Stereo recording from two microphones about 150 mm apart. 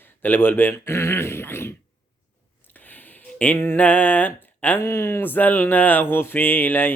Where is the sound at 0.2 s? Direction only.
15° left (ahead or behind).